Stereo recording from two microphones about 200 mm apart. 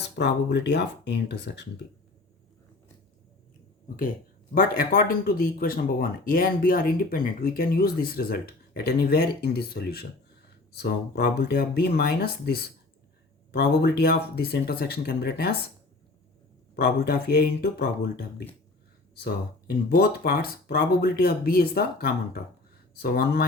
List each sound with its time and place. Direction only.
0.2 s speech: 60° left (ahead or behind)
3.8 s speech: 40° left (ahead or behind)
16.7 s speech: 50° left (ahead or behind)